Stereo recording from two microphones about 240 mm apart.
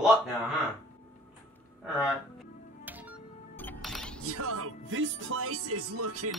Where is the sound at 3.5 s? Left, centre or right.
Centre.